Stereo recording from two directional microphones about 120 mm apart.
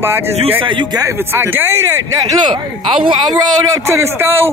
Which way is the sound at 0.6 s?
40° right (ahead or behind).